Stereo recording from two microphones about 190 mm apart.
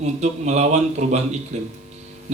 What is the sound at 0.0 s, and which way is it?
Speech, 35° right (ahead or behind).